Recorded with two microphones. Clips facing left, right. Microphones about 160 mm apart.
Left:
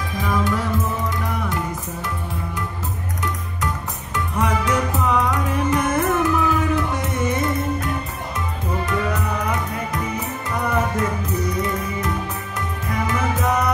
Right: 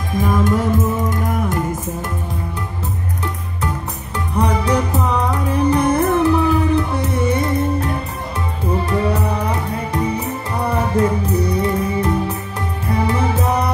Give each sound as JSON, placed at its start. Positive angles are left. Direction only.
{"t": 0.2, "sound": "music", "side_deg": -45}
{"t": 4.4, "sound": "music", "side_deg": -35}